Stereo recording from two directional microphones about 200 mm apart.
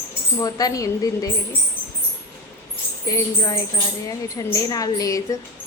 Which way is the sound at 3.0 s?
20° left (ahead or behind).